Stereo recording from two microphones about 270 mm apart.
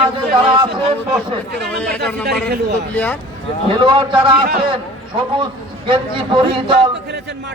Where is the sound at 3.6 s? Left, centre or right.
Centre.